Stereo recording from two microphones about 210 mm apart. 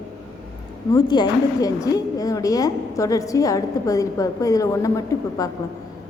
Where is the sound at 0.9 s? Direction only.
20° left (ahead or behind).